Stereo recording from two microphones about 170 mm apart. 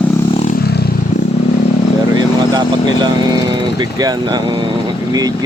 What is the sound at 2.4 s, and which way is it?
Speech, 25° right (ahead or behind).